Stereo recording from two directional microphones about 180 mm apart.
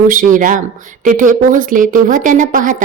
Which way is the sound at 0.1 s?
50° right (ahead or behind).